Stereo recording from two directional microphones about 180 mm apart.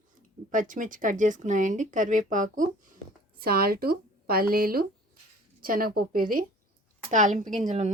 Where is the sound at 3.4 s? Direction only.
55° right (ahead or behind).